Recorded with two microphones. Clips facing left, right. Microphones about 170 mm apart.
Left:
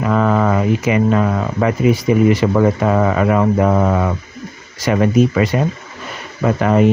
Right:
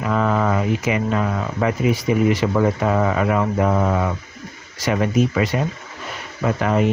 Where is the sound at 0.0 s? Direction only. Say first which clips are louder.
Left 4 dB; 65° left (ahead or behind).